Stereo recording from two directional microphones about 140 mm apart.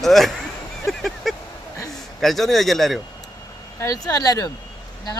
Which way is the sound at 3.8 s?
25° left (ahead or behind).